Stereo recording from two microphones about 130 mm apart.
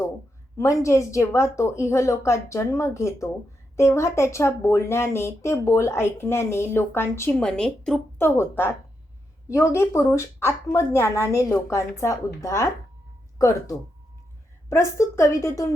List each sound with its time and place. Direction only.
0.5 s a woman's voice: 20° left (ahead or behind)
7.3 s a woman's voice: 5° left (ahead or behind)
8.2 s a woman's voice: 15° left (ahead or behind)
14.7 s a woman's voice: 20° left (ahead or behind)